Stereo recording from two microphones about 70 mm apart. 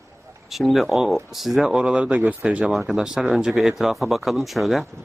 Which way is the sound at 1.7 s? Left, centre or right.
Centre.